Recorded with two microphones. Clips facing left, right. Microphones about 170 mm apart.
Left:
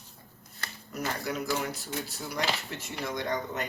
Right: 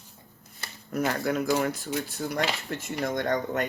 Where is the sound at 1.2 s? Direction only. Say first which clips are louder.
Right 5 dB; 50° right (ahead or behind).